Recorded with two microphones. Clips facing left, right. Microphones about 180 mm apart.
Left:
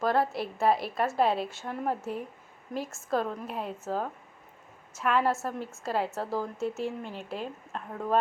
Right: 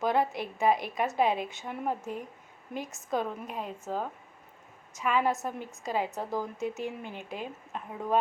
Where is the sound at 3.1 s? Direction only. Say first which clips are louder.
Left 2 dB; centre (ahead or behind).